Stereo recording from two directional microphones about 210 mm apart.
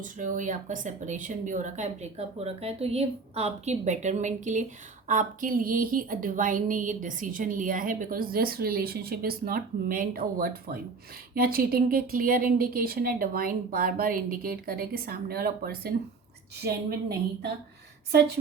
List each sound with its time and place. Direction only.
0.0 s a woman's voice: 40° right (ahead or behind)